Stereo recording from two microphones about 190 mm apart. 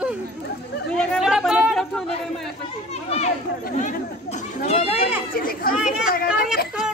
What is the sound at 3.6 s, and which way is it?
Chatter, 40° left (ahead or behind).